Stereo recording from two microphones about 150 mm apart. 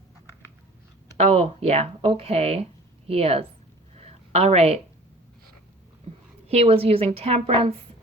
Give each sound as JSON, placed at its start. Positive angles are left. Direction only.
{"t": 1.1, "sound": "a woman's voice", "side_deg": -40}
{"t": 3.9, "sound": "a sound", "side_deg": -45}
{"t": 6.5, "sound": "a woman's voice", "side_deg": -45}